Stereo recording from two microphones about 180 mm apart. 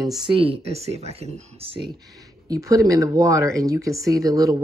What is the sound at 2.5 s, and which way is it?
Speech, 20° right (ahead or behind).